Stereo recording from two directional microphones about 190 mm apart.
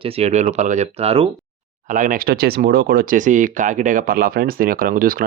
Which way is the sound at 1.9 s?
45° right (ahead or behind).